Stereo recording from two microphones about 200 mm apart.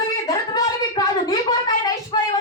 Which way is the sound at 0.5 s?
20° left (ahead or behind).